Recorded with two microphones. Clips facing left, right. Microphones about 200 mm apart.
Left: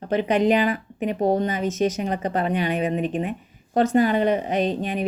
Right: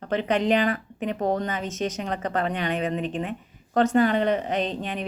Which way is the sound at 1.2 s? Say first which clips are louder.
Left 5 dB; 30° left (ahead or behind).